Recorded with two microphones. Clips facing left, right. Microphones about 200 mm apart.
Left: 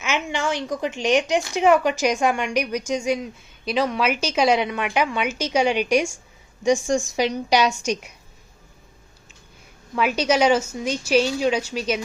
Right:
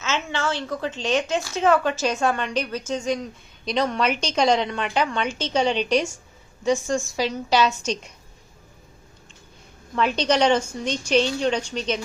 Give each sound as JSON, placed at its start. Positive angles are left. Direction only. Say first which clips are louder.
{"t": 0.0, "sound": "speech", "louder": "left 1 dB", "side_deg": 15}
{"t": 9.9, "sound": "speech", "louder": "left 1 dB", "side_deg": 5}